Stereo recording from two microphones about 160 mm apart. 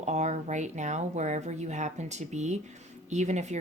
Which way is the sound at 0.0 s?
45° right (ahead or behind).